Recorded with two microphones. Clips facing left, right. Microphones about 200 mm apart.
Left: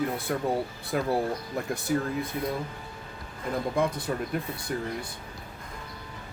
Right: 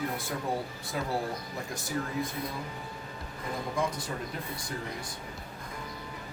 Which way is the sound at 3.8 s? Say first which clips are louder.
Left 4 dB; 60° left (ahead or behind).